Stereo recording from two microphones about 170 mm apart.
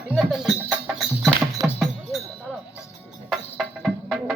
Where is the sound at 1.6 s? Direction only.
20° right (ahead or behind).